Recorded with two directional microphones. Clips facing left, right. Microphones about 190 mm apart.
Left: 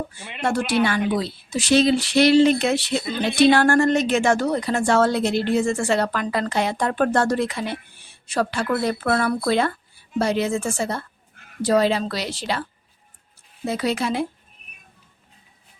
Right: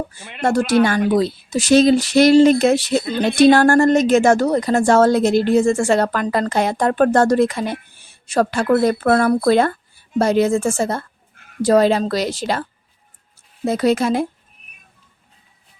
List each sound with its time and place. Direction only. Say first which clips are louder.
0.4 s speech: right 5 dB; 45° right (ahead or behind)
13.7 s speech: right 7 dB; 45° right (ahead or behind)